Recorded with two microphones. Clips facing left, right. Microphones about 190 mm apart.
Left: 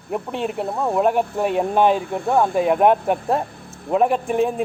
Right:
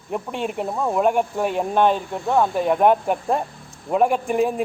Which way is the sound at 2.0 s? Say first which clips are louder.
Left 4 dB; 60° left (ahead or behind).